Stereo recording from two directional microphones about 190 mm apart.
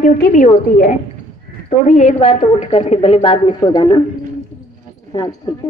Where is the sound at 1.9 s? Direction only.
35° left (ahead or behind).